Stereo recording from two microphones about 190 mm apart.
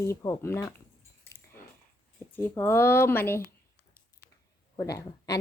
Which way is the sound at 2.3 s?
10° left (ahead or behind).